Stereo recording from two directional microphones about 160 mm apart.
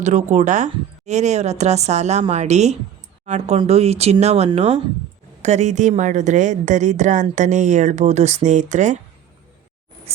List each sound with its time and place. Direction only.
0.0 s a woman's voice: 50° right (ahead or behind)